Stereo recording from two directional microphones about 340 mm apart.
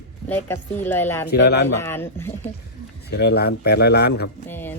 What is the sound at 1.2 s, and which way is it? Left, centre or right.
Speech, left.